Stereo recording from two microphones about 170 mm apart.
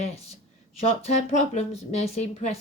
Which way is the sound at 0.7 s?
40° left (ahead or behind).